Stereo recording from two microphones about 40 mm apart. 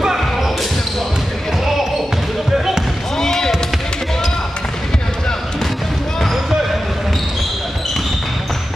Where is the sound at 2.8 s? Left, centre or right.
Centre.